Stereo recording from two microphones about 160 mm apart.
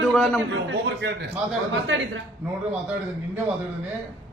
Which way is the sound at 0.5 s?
90° right.